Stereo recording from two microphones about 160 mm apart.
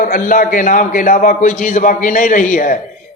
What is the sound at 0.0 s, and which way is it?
A man's voice, 55° left (ahead or behind).